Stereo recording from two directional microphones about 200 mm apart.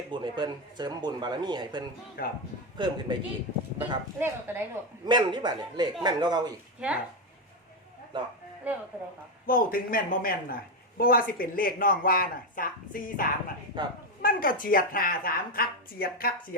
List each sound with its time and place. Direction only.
0.1 s speech: 25° right (ahead or behind)
4.2 s speech: 10° right (ahead or behind)
5.0 s speech: 25° right (ahead or behind)
6.7 s speech: 5° right (ahead or behind)
8.1 s speech: 25° right (ahead or behind)
8.7 s speech: 5° right (ahead or behind)
9.5 s a man's voice: 45° left (ahead or behind)
13.7 s speech: 25° right (ahead or behind)
14.2 s a man's voice: 45° left (ahead or behind)